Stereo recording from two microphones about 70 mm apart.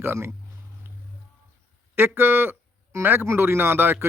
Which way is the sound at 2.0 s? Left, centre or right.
Right.